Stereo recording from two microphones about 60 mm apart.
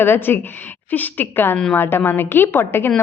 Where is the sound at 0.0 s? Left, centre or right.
Left.